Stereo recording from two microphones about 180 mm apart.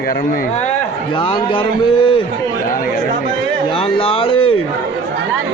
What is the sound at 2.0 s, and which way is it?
Speech, 30° left (ahead or behind).